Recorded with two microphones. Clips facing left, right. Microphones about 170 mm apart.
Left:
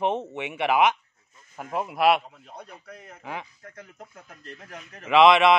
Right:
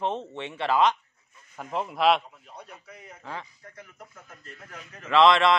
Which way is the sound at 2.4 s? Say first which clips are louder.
Left 3 dB; 55° left (ahead or behind).